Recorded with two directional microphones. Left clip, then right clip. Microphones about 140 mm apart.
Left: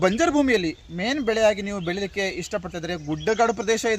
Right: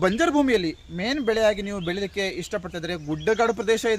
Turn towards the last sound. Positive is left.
turn(degrees=10)  # may be behind; listen again after turning